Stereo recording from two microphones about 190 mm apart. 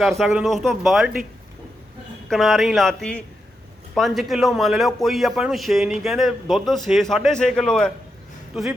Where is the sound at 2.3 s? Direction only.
Centre (ahead or behind).